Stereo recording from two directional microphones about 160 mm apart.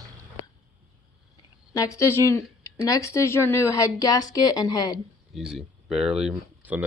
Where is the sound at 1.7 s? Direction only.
20° left (ahead or behind).